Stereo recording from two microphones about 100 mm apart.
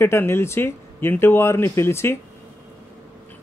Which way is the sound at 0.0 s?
25° left (ahead or behind).